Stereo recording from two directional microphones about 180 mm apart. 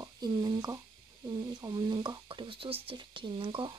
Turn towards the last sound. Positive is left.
turn(degrees=-30)  # may be behind; listen again after turning